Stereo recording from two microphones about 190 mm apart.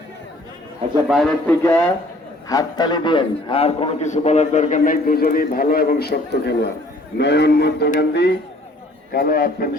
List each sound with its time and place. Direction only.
1.0 s a man's voice: centre (ahead or behind)
2.5 s a man's voice: 20° left (ahead or behind); by 8.3 s 60° left (ahead or behind)
9.1 s a man's voice: 50° left (ahead or behind)